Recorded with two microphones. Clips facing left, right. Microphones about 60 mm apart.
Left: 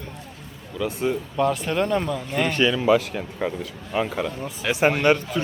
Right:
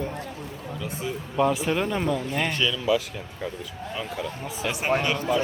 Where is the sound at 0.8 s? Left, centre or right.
Left.